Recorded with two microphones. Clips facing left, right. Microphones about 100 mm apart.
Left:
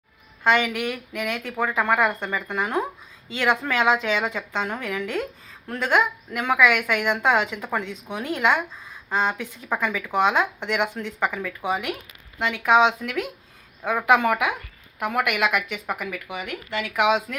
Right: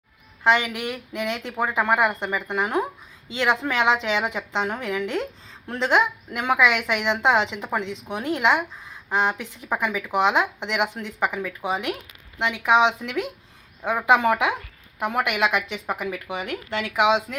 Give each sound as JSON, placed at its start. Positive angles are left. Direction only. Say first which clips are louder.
{"t": 0.4, "sound": "speech", "louder": "even", "side_deg": -15}